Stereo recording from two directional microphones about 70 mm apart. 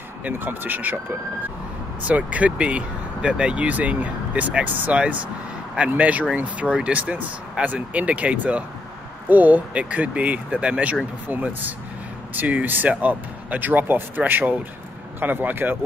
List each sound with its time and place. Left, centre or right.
0.2 s speech: right
2.0 s speech: centre